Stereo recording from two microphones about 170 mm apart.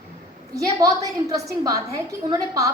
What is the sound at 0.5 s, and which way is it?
A woman's voice, 20° right (ahead or behind).